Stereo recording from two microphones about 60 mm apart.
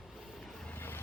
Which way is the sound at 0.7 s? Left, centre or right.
Left.